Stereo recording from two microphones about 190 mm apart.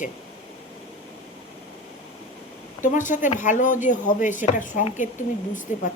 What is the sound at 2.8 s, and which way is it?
Speech, 40° left (ahead or behind).